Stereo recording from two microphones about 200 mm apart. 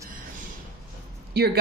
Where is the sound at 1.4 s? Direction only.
55° right (ahead or behind).